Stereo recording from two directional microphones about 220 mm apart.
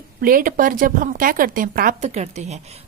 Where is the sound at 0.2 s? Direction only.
40° right (ahead or behind).